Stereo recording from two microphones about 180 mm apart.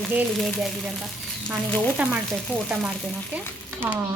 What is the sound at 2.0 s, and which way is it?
Speech, 5° right (ahead or behind).